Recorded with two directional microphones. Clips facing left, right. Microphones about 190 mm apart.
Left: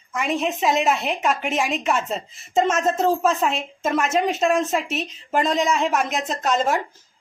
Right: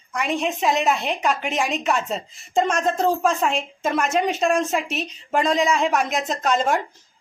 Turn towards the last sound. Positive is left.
turn(degrees=0)  # may be behind; listen again after turning